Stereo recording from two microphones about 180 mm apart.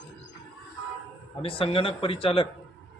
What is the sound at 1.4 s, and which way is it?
Speech, 30° left (ahead or behind).